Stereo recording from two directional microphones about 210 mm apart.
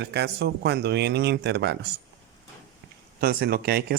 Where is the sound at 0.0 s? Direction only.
55° right (ahead or behind).